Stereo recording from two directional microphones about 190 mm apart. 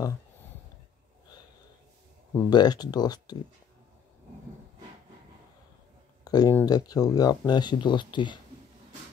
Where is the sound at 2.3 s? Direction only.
20° left (ahead or behind).